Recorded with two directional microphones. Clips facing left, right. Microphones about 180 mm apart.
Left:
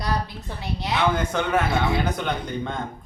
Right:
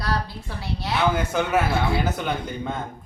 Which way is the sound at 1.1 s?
5° right (ahead or behind).